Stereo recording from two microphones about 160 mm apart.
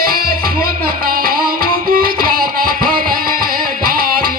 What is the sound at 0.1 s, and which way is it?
Music, 65° right (ahead or behind).